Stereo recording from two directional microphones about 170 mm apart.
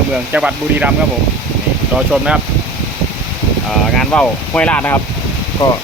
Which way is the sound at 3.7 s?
5° left (ahead or behind).